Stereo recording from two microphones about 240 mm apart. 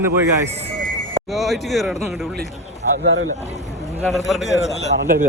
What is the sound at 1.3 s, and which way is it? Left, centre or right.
Speech, centre.